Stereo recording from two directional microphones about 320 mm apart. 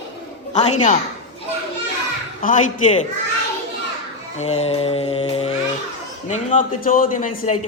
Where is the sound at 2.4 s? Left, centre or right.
Left.